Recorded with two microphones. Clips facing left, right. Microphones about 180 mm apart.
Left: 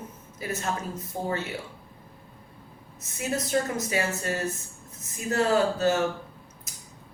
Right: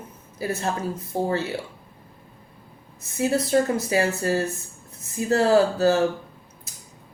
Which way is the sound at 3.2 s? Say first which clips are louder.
Right 6 dB; 35° right (ahead or behind).